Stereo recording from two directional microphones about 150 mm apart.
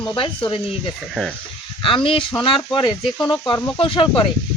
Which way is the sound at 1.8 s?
35° left (ahead or behind).